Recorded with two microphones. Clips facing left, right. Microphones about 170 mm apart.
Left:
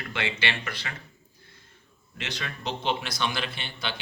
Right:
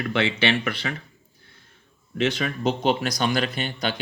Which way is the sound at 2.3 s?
55° right (ahead or behind).